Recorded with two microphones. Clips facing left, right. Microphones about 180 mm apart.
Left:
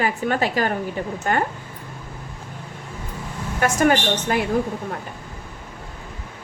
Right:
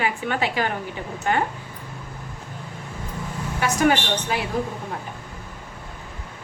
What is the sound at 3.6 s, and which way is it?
Speech, 50° left (ahead or behind).